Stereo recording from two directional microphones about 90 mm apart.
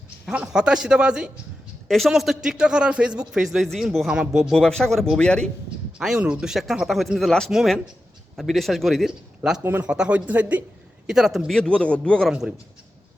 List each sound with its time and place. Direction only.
0.3 s a man's voice: 10° right (ahead or behind)
4.5 s a man's voice: 10° left (ahead or behind)
6.0 s a man's voice: 10° right (ahead or behind); by 12.3 s 10° left (ahead or behind)
12.3 s speech: 5° right (ahead or behind)